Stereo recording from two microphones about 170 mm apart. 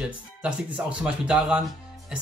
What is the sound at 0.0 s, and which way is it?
Speech, 5° right (ahead or behind).